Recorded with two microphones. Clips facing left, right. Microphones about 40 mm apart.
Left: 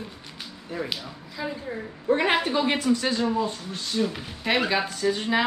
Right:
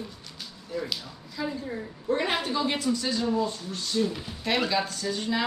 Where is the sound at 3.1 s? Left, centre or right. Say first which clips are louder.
Left 2 dB; left.